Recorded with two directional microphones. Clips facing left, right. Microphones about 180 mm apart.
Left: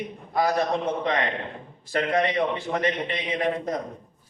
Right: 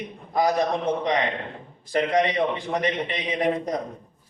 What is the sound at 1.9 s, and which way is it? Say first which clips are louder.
A man's voice: right 2 dB; 15° right (ahead or behind).